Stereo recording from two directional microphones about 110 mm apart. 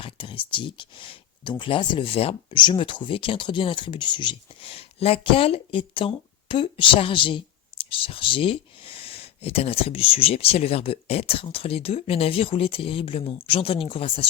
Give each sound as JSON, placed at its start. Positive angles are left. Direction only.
{"t": 0.0, "sound": "speech", "side_deg": 50}